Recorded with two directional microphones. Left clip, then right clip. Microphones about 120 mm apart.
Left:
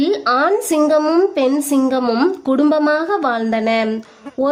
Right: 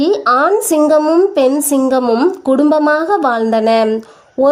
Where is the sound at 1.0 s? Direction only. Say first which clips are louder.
Right 4 dB; 20° left (ahead or behind).